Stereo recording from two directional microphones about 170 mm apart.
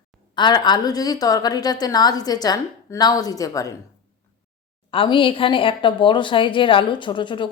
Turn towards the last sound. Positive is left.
turn(degrees=30)  # may be behind; listen again after turning